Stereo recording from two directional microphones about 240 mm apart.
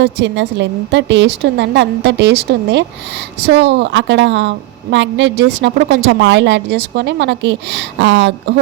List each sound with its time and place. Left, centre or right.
0.0 s a woman's voice: right